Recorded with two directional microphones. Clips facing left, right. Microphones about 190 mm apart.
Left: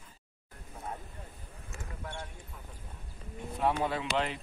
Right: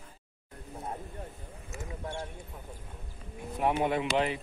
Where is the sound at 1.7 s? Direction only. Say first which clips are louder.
Right 5 dB; centre (ahead or behind).